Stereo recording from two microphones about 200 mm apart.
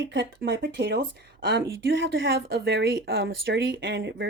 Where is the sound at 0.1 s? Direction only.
65° right (ahead or behind).